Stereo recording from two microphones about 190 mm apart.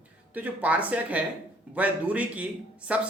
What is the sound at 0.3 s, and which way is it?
A man's voice, 10° right (ahead or behind).